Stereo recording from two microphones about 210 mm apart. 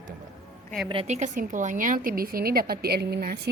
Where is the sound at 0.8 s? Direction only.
30° right (ahead or behind).